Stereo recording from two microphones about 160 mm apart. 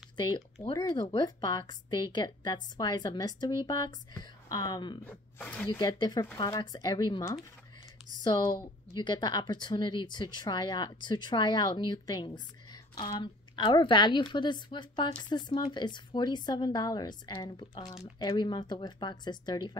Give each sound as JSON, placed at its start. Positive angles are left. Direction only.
{"t": 0.2, "sound": "a woman's voice", "side_deg": 25}
{"t": 5.0, "sound": "speech", "side_deg": 10}
{"t": 5.7, "sound": "a woman's voice", "side_deg": 25}